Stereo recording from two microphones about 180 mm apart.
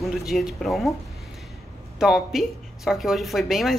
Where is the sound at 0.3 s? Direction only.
Centre (ahead or behind).